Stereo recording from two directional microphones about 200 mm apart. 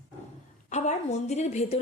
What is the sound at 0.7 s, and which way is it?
Speech, 35° left (ahead or behind).